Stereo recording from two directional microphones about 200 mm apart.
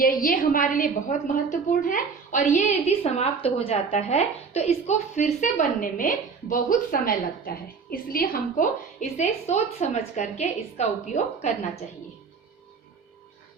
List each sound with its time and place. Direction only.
0.0 s a woman's voice: 45° left (ahead or behind)